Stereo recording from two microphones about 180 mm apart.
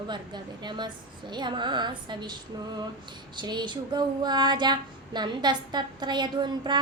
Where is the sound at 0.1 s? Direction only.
25° right (ahead or behind).